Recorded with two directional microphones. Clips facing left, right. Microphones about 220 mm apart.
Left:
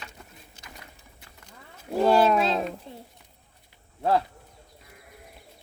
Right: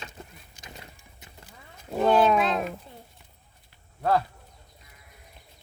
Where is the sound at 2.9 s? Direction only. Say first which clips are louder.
Left 5 dB; 30° left (ahead or behind).